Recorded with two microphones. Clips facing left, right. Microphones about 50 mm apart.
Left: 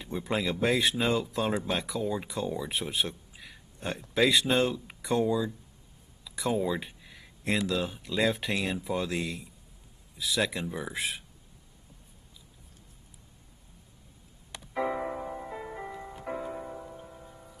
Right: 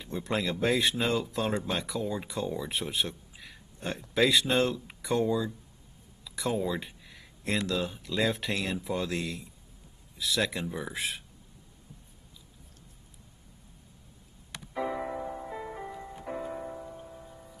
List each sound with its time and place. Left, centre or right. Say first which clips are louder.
0.0 s speech: left 1 dB; centre
14.7 s music: left 2 dB; left
15.0 s music: even; centre
16.4 s music: right 1 dB; centre